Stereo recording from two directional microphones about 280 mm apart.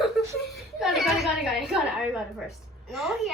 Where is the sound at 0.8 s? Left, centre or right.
Centre.